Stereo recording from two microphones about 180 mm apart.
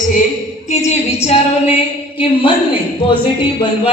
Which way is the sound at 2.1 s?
30° left (ahead or behind).